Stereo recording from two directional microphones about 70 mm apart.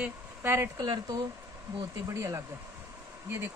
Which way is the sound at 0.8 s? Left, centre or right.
Right.